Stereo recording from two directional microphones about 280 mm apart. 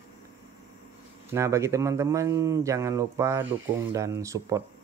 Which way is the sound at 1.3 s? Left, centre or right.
Centre.